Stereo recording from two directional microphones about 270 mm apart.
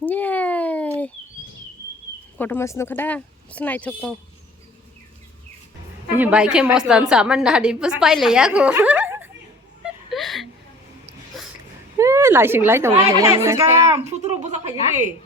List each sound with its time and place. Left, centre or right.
0.0 s a sound: centre
2.4 s speech: centre
6.1 s a woman's voice: centre
9.8 s whimper: centre
11.9 s speech: centre
14.0 s speech: right